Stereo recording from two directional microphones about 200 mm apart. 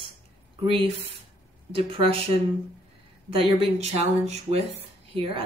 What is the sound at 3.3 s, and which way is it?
Speech, 30° right (ahead or behind).